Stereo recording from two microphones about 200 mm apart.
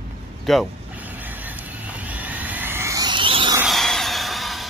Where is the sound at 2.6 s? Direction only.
10° right (ahead or behind).